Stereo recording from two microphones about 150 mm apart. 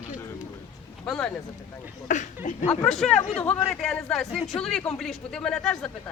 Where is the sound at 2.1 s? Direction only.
55° left (ahead or behind).